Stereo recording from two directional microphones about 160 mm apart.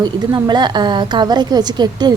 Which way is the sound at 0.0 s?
25° right (ahead or behind).